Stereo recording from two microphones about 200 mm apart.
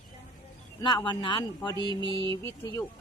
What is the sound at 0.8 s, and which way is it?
Speech, 25° left (ahead or behind).